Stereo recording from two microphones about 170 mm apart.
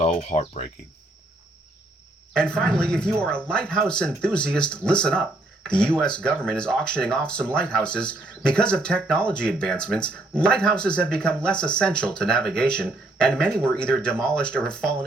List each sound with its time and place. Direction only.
0.0 s speech: 35° left (ahead or behind)
2.3 s speech: 5° left (ahead or behind)